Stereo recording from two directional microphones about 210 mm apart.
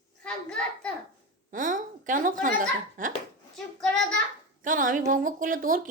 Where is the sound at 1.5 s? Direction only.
40° right (ahead or behind).